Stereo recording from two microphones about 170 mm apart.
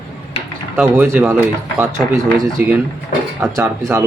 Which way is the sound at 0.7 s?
10° right (ahead or behind).